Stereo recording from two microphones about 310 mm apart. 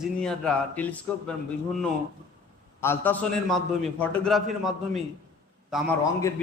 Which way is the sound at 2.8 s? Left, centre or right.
Centre.